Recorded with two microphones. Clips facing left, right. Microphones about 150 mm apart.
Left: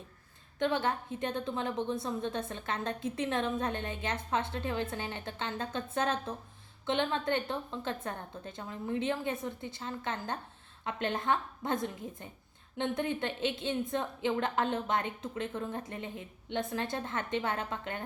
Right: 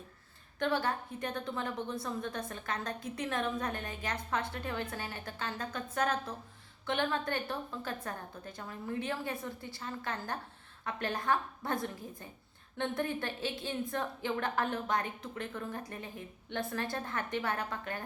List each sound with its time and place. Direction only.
0.6 s a woman's voice: 20° left (ahead or behind)